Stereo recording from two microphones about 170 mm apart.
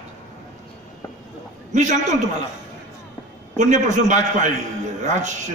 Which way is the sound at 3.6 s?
45° right (ahead or behind).